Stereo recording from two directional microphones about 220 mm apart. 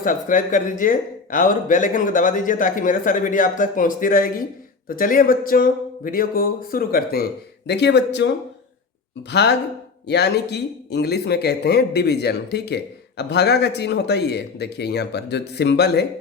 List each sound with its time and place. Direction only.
0.0 s speech: 40° left (ahead or behind)